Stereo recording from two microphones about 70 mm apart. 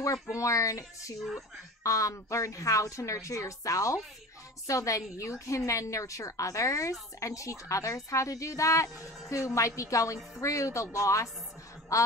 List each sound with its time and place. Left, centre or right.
0.0 s a woman's voice: left